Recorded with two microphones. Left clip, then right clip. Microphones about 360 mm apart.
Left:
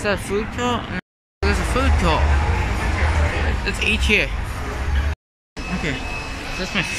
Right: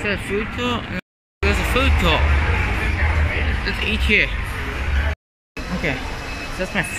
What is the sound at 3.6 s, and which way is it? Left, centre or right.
Speech, centre.